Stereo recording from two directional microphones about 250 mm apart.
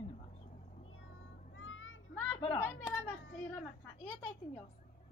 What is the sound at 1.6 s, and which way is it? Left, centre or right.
Children playing, left.